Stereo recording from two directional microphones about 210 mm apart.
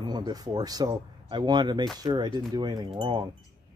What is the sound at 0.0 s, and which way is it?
Speech, 20° right (ahead or behind).